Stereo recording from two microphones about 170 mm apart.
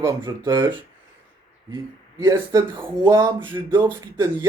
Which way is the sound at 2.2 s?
15° right (ahead or behind).